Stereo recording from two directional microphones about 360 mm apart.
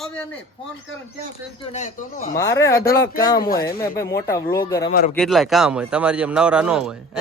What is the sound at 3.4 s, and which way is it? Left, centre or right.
Speech, left.